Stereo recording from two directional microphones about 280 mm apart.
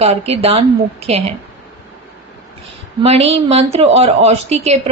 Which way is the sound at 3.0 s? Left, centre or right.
Right.